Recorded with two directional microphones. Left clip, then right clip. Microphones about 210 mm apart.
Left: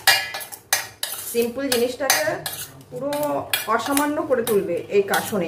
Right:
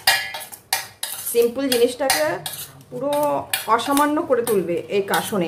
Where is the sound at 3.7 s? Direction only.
45° right (ahead or behind).